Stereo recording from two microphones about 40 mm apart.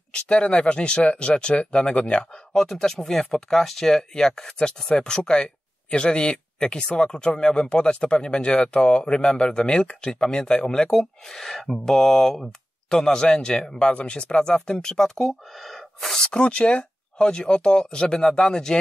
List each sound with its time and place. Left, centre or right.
0.1 s speech: left
2.3 s speech: centre
10.7 s speech: centre
16.2 s speech: left